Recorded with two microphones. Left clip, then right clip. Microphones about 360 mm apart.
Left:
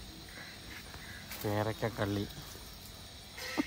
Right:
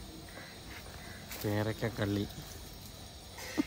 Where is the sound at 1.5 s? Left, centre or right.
Centre.